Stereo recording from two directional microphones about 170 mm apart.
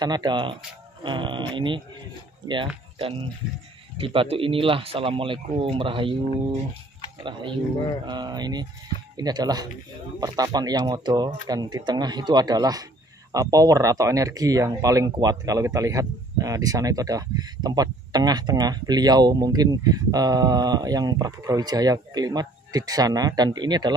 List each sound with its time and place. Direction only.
0.0 s speech: 25° right (ahead or behind)
8.1 s speech: 25° right (ahead or behind)